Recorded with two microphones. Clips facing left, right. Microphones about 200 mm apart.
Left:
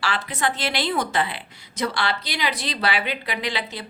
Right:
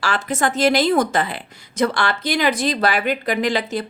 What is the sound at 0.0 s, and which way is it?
A woman's voice, 45° right (ahead or behind).